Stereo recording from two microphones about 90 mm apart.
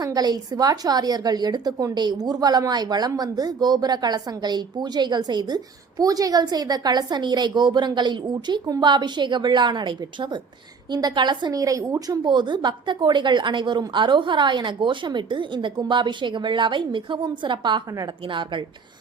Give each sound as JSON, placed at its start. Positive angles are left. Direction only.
{"t": 0.0, "sound": "a woman's voice", "side_deg": -45}
{"t": 6.0, "sound": "a woman's voice", "side_deg": -45}
{"t": 11.6, "sound": "a woman's voice", "side_deg": -35}
{"t": 12.2, "sound": "a woman's voice", "side_deg": -60}